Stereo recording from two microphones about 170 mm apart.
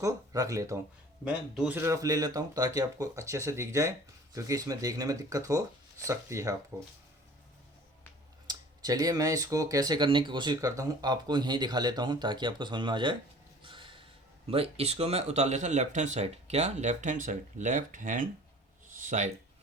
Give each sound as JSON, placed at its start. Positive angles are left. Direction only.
{"t": 0.0, "sound": "speech", "side_deg": -20}
{"t": 1.2, "sound": "speech", "side_deg": -5}
{"t": 8.4, "sound": "speech", "side_deg": -20}
{"t": 13.6, "sound": "gasp", "side_deg": -30}
{"t": 14.4, "sound": "speech", "side_deg": -35}
{"t": 18.9, "sound": "a sound", "side_deg": -45}